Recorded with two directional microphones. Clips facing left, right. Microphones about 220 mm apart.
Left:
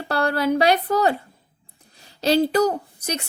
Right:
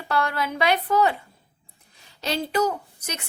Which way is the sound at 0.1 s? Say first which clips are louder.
Left 5 dB; 35° left (ahead or behind).